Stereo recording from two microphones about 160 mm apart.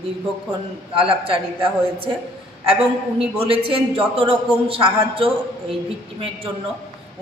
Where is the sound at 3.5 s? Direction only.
35° right (ahead or behind).